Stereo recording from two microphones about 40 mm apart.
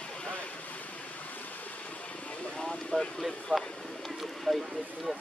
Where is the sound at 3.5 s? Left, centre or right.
Left.